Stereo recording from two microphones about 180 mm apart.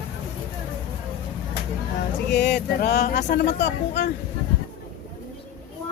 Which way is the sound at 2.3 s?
70° left (ahead or behind).